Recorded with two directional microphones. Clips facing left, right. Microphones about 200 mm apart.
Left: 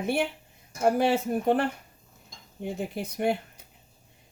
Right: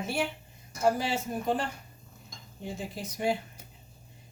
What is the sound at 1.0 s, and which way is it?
Speech, 60° left (ahead or behind).